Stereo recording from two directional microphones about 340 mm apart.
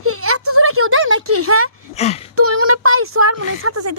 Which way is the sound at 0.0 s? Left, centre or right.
Right.